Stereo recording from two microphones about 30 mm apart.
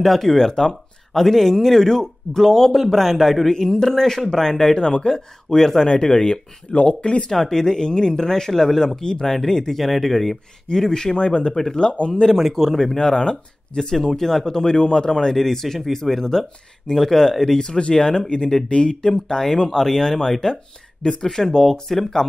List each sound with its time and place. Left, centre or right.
0.0 s speech: centre
3.5 s speech: centre
4.7 s speech: left
5.6 s speech: centre
5.9 s speech: left
7.5 s speech: left
9.8 s speech: centre
10.7 s speech: centre
11.5 s speech: centre
12.8 s speech: left
15.3 s speech: centre
17.6 s speech: left
17.9 s speech: centre
19.8 s speech: centre